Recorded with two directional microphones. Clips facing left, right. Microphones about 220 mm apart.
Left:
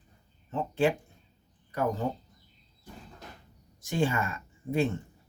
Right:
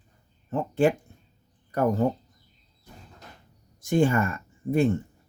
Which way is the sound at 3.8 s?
50° right (ahead or behind).